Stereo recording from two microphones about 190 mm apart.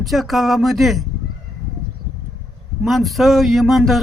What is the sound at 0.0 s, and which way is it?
Speech, centre (ahead or behind).